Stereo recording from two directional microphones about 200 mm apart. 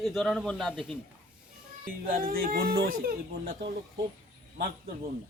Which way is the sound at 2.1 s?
45° right (ahead or behind).